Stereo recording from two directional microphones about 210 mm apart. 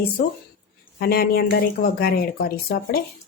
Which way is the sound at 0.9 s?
45° left (ahead or behind).